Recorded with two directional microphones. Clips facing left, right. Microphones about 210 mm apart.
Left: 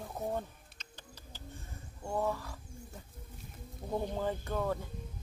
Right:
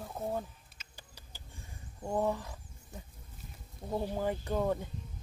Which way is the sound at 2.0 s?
20° right (ahead or behind).